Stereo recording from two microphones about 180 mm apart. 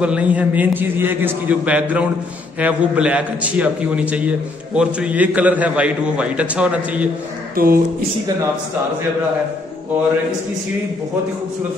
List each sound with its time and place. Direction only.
0.0 s a man's voice: 5° right (ahead or behind)
7.5 s speech: 55° right (ahead or behind)